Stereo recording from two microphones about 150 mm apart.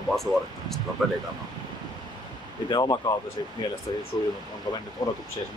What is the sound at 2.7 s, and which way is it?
Speech, 25° left (ahead or behind).